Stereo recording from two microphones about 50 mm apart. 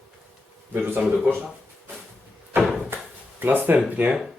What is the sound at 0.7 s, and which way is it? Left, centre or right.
Speech, right.